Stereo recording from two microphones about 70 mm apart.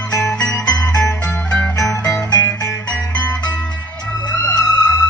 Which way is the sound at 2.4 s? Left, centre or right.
Left.